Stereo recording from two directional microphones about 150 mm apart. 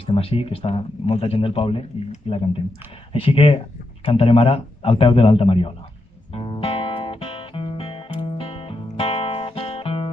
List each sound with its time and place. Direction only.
0.0 s speech: 40° left (ahead or behind)
3.1 s speech: 40° left (ahead or behind)
6.3 s music: 35° left (ahead or behind)